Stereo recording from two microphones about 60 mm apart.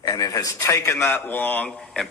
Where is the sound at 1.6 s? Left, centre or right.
Centre.